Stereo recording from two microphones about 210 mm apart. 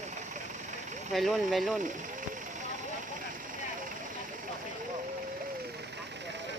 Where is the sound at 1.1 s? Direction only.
Centre (ahead or behind).